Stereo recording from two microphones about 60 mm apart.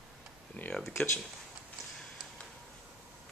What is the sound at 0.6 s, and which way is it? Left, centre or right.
Speech, left.